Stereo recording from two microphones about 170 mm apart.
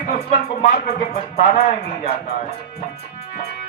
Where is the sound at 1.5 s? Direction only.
55° left (ahead or behind).